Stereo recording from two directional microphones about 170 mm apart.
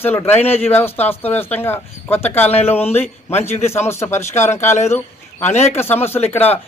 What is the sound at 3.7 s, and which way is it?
Speech, 15° left (ahead or behind).